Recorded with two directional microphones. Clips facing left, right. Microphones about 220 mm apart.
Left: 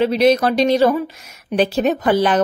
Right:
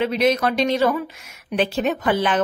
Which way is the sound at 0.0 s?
35° left (ahead or behind).